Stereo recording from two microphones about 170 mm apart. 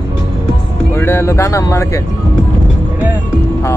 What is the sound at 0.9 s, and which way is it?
Music, 15° left (ahead or behind).